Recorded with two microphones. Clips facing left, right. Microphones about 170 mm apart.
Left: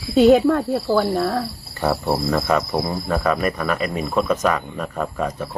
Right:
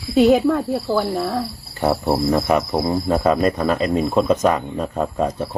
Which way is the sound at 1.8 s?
20° right (ahead or behind).